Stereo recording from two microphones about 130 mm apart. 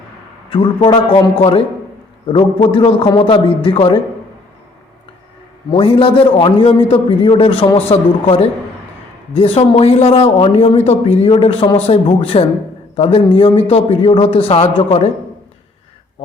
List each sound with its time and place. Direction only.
0.5 s a man's voice: 45° left (ahead or behind)
5.7 s speech: 45° left (ahead or behind)